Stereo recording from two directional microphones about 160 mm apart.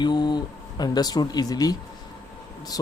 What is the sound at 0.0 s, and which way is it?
Speech, 25° left (ahead or behind).